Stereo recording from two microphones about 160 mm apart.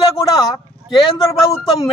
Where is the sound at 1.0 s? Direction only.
20° left (ahead or behind).